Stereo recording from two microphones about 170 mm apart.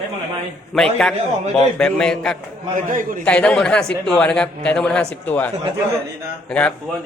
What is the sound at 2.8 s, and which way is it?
Speech, 50° right (ahead or behind).